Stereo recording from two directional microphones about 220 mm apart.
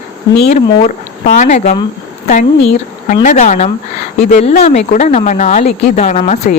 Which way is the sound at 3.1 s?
35° left (ahead or behind).